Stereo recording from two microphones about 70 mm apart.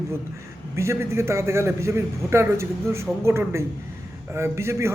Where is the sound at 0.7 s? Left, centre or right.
Right.